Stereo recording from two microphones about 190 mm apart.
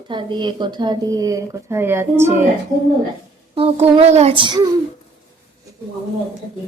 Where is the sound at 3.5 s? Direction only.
30° right (ahead or behind).